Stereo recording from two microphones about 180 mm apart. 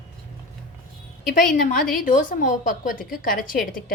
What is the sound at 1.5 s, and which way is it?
A woman's voice, 50° left (ahead or behind).